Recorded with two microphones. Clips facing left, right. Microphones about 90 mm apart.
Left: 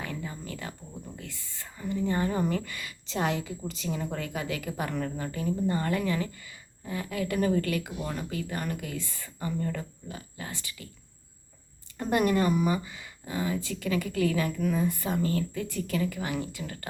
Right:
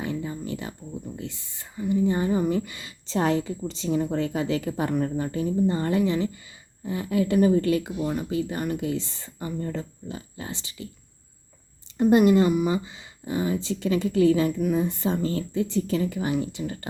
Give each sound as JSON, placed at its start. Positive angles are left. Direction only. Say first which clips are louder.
{"t": 0.0, "sound": "a sound", "louder": "right 7 dB", "side_deg": -25}
{"t": 2.5, "sound": "a woman's voice", "louder": "right 5 dB", "side_deg": -20}
{"t": 11.9, "sound": "a woman's voice", "louder": "right 8 dB", "side_deg": -20}